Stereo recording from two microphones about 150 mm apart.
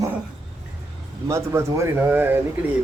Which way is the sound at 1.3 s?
20° right (ahead or behind).